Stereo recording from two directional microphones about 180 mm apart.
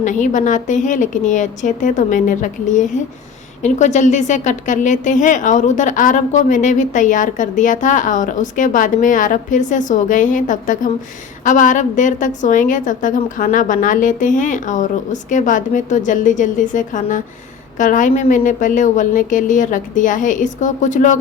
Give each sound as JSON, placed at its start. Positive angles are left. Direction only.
{"t": 0.0, "sound": "a woman's voice", "side_deg": 45}